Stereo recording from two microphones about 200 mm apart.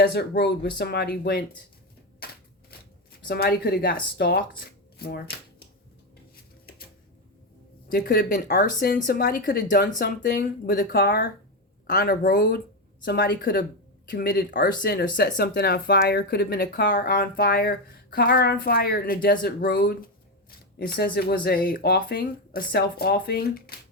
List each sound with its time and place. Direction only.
0.0 s speech: 55° left (ahead or behind)
2.2 s shuffling cards: 50° left (ahead or behind)
4.2 s speech: 50° left (ahead or behind)
6.7 s a sound: 50° left (ahead or behind)
7.9 s speech: 45° left (ahead or behind)